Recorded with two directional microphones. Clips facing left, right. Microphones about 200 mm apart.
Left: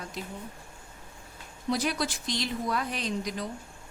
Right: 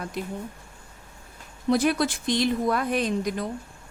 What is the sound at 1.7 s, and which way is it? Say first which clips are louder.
A woman's voice: right 7 dB; 55° right (ahead or behind).